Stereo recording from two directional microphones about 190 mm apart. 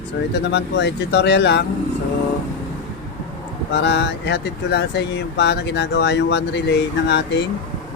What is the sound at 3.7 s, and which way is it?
Speech, 65° left (ahead or behind).